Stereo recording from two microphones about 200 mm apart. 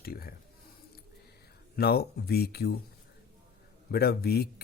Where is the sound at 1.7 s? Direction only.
50° left (ahead or behind).